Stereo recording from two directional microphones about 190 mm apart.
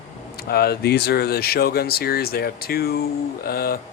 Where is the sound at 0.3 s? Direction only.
55° left (ahead or behind).